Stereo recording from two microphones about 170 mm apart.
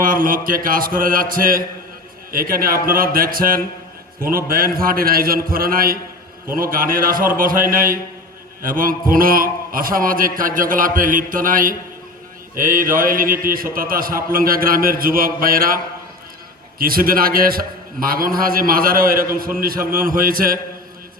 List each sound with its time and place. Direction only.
0.0 s a man's voice: 55° right (ahead or behind)